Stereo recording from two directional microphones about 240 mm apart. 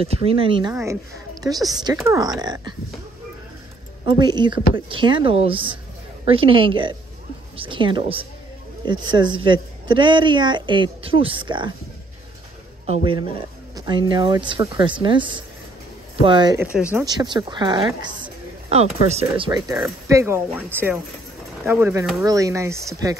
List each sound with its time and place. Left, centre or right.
0.0 s a woman's voice: right
4.0 s a woman's voice: centre
12.8 s a woman's voice: right